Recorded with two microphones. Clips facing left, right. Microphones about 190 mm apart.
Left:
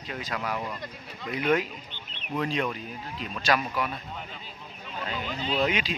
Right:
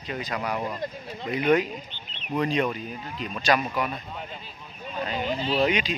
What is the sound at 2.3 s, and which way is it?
Speech, centre (ahead or behind).